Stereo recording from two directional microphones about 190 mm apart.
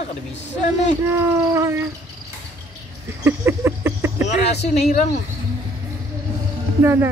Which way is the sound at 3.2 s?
15° right (ahead or behind).